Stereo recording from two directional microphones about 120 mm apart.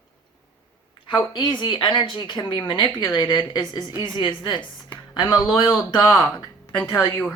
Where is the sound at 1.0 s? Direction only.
40° left (ahead or behind).